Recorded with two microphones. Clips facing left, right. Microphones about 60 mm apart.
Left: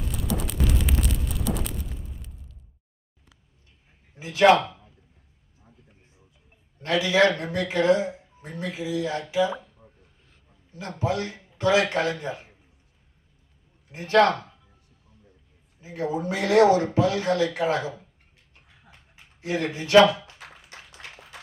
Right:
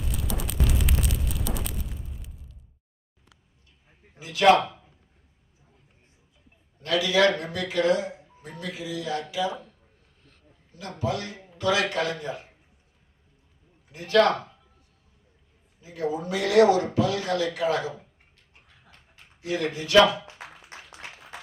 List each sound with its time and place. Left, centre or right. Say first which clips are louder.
0.0 s a sound: left 3 dB; centre
4.2 s a man's voice: left 1 dB; left
6.8 s speech: left 1 dB; left
10.8 s speech: left 2 dB; left
13.9 s speech: left 2 dB; left
15.8 s speech: left 1 dB; left
18.7 s dog: left 2 dB; centre
19.4 s speech: left 1 dB; left